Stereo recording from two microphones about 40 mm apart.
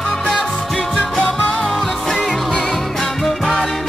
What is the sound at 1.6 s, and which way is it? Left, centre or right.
Music, centre.